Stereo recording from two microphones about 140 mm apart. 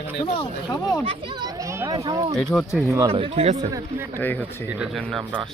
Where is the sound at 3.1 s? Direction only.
40° right (ahead or behind).